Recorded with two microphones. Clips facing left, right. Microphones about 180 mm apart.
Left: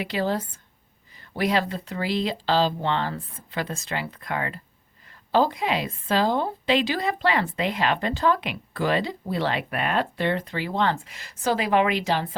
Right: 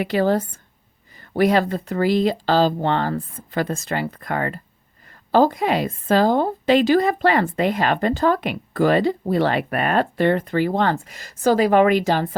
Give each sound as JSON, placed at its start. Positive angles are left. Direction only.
{"t": 0.0, "sound": "a woman's voice", "side_deg": -50}